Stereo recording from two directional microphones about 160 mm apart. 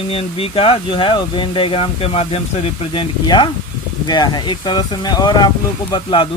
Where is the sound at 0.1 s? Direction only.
35° left (ahead or behind).